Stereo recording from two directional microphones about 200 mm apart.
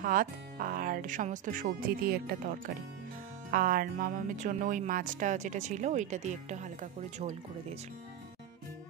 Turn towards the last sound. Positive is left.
turn(degrees=-35)  # may be behind; listen again after turning